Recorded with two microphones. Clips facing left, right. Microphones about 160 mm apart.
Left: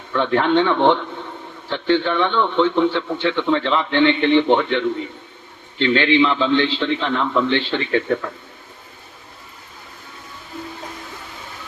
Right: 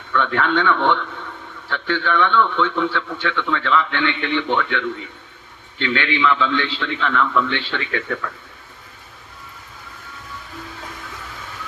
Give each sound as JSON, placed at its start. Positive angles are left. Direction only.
{"t": 0.1, "sound": "a man's voice", "side_deg": 30}